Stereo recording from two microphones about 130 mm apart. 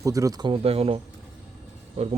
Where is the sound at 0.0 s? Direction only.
25° right (ahead or behind).